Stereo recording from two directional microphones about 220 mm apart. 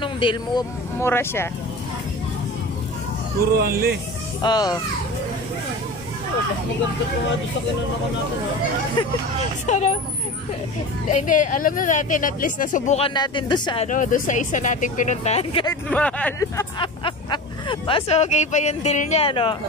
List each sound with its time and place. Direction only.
0.0 s speech: 20° left (ahead or behind)
0.9 s speech: 10° left (ahead or behind)
3.3 s speech: 45° right (ahead or behind)
4.4 s a child's voice: 20° left (ahead or behind)
9.0 s a child's voice: 20° left (ahead or behind)
9.7 s speech: 30° left (ahead or behind)
11.2 s speech: 35° left (ahead or behind); by 13.8 s 20° left (ahead or behind)
13.8 s speech: 35° left (ahead or behind)
15.9 s speech: 5° left (ahead or behind); by 19.5 s 25° left (ahead or behind)